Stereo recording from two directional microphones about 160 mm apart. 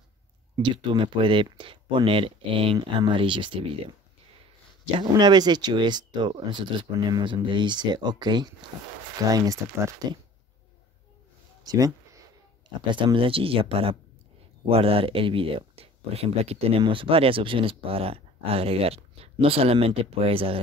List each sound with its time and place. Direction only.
0.6 s speech: 30° right (ahead or behind)
4.9 s speech: 25° right (ahead or behind)
11.6 s speech: 20° right (ahead or behind)